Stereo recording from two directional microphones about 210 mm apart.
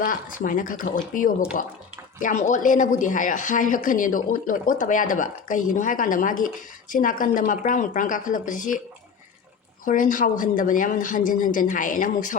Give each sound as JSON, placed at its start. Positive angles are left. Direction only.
{"t": 0.0, "sound": "speech", "side_deg": 40}
{"t": 9.8, "sound": "speech", "side_deg": 40}